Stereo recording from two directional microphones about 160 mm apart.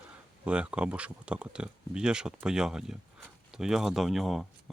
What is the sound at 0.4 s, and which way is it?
Speech, 5° right (ahead or behind).